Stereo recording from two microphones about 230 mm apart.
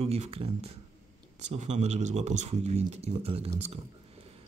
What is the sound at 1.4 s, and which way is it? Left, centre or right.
Speech, right.